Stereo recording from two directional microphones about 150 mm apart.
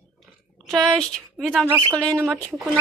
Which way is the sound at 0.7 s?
5° left (ahead or behind).